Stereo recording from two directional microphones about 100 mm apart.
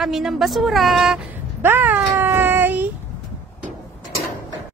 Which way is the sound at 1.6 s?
20° right (ahead or behind).